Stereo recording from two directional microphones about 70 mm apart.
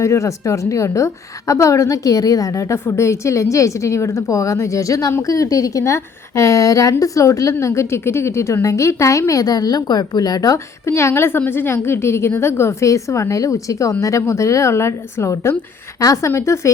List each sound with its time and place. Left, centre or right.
0.0 s a woman's voice: left
10.8 s a woman's voice: left